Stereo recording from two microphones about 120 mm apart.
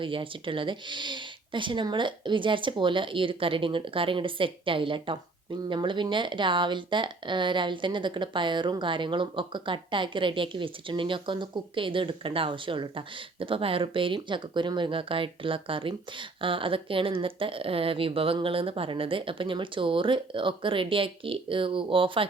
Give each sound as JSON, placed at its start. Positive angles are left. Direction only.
{"t": 0.0, "sound": "speech", "side_deg": -45}